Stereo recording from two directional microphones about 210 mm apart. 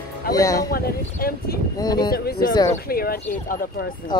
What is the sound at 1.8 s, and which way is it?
Speech, 20° left (ahead or behind).